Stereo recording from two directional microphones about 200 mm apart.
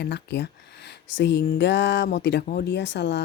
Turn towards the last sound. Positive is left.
turn(degrees=60)  # may be behind; listen again after turning